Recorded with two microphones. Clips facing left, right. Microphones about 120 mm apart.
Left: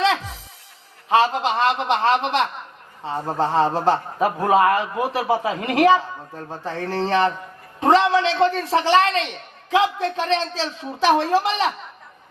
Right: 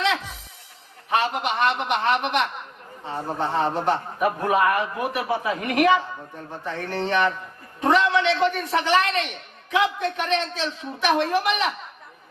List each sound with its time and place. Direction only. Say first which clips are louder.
1.1 s a man's voice: left 5 dB; 30° left (ahead or behind)
3.6 s a man's voice: left 3 dB; 30° left (ahead or behind)